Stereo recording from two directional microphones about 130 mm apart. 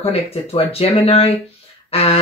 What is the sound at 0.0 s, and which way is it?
Speech, 50° left (ahead or behind).